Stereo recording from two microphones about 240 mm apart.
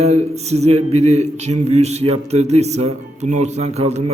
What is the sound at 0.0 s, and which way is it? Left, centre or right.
A man's voice, right.